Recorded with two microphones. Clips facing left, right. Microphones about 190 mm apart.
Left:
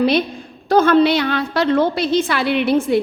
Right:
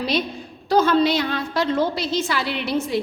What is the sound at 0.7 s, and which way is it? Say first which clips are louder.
A woman's voice: left 4 dB; 55° left (ahead or behind).